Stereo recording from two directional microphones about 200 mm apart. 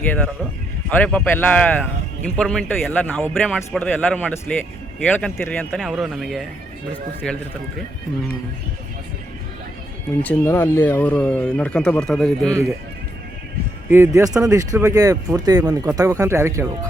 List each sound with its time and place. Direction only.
0.9 s speech: 5° left (ahead or behind)
10.2 s speech: 10° left (ahead or behind)
13.9 s speech: 15° right (ahead or behind)